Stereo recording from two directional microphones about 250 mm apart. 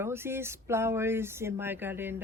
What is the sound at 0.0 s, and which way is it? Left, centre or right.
Speech, centre.